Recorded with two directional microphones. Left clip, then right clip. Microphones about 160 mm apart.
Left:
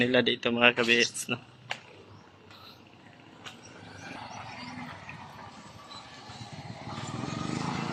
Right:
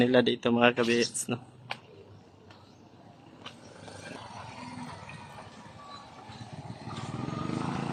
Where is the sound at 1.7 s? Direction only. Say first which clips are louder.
Left 2 dB; centre (ahead or behind).